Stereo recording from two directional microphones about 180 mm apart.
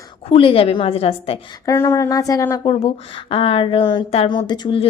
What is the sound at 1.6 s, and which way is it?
Speech, 15° left (ahead or behind).